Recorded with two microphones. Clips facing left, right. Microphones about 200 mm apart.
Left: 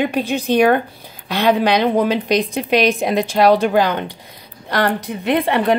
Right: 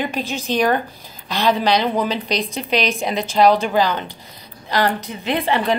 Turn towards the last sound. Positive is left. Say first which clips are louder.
# left 3 dB
turn(degrees=55)  # may be behind; listen again after turning